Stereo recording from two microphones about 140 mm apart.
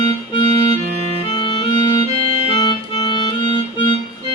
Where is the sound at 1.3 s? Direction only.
35° left (ahead or behind).